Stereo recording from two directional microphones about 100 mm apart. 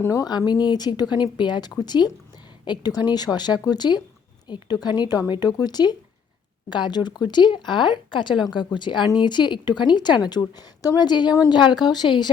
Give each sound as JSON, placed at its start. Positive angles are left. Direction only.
{"t": 0.0, "sound": "speech", "side_deg": 35}